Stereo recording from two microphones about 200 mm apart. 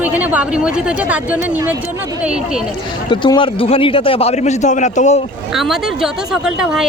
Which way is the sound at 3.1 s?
25° left (ahead or behind).